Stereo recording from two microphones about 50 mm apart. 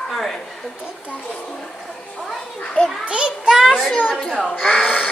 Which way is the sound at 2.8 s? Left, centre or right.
Left.